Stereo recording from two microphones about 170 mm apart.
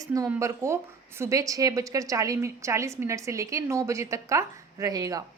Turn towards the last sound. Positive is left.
turn(degrees=-20)  # may be behind; listen again after turning